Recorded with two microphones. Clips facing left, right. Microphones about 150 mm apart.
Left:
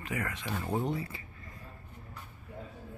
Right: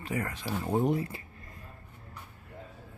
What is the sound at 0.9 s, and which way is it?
Speech, 50° right (ahead or behind).